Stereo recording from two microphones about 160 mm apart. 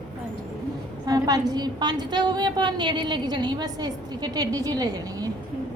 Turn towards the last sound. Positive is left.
turn(degrees=-25)  # may be behind; listen again after turning